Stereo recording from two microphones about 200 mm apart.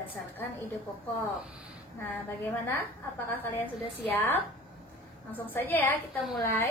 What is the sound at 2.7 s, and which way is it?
A woman's voice, 10° left (ahead or behind).